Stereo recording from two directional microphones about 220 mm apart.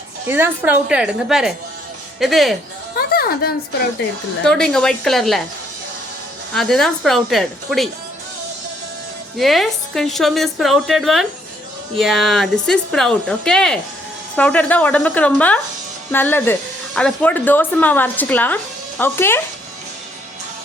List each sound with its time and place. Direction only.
0.3 s a woman's voice: 10° right (ahead or behind)
3.1 s a woman's voice: 45° left (ahead or behind)
4.4 s a woman's voice: 5° left (ahead or behind)
6.5 s a woman's voice: centre (ahead or behind)
9.4 s a woman's voice: centre (ahead or behind)